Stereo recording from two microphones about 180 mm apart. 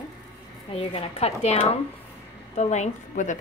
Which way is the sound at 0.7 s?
30° left (ahead or behind).